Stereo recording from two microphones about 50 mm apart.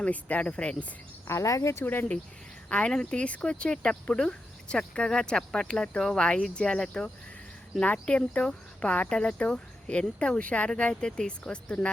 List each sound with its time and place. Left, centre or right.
0.0 s speech: left
1.3 s speech: left
1.8 s speech: left
2.6 s speech: left